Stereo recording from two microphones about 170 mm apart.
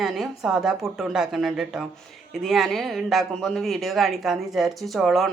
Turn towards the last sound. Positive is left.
turn(degrees=0)  # may be behind; listen again after turning